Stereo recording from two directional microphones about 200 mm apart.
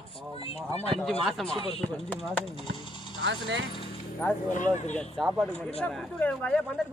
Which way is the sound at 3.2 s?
65° right (ahead or behind).